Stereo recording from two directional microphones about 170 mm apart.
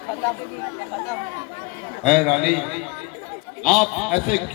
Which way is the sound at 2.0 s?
5° right (ahead or behind).